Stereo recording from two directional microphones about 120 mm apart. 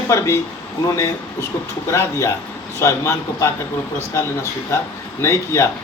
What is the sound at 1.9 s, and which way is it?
A man's voice, 25° left (ahead or behind).